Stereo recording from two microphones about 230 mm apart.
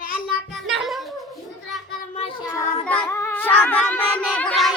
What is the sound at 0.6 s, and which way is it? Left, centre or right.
Music, centre.